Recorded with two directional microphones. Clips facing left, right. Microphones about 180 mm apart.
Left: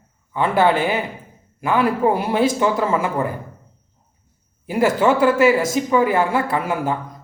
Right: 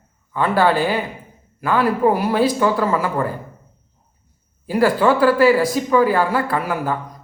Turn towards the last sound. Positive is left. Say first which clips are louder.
# even
turn(degrees=25)  # may be behind; listen again after turning